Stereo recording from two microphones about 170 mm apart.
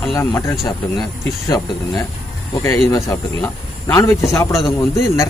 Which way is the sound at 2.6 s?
20° left (ahead or behind).